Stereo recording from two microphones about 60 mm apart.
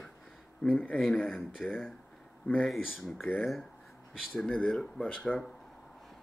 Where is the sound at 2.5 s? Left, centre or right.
Left.